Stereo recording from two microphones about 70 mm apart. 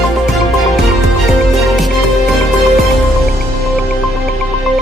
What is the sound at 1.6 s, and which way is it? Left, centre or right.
Music, centre.